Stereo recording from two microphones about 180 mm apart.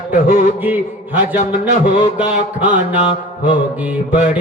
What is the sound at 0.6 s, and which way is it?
Speech, 10° right (ahead or behind).